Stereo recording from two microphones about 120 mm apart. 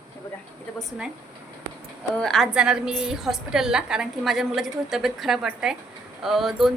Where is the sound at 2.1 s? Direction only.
5° left (ahead or behind).